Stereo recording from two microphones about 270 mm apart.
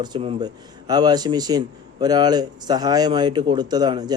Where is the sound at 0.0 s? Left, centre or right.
Centre.